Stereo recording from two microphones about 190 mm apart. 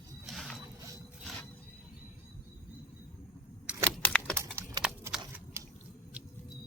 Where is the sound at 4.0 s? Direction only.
5° left (ahead or behind).